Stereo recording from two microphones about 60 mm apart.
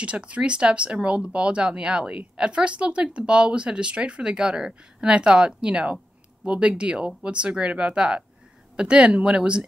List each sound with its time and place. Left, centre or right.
0.0 s speech: centre